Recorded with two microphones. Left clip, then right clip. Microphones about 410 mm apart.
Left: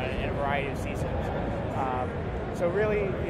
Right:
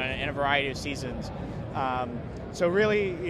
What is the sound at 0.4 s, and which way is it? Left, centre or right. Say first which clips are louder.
Speech: right 4 dB; right.